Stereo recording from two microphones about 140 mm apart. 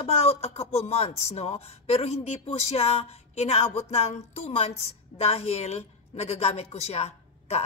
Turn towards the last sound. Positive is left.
turn(degrees=50)  # may be behind; listen again after turning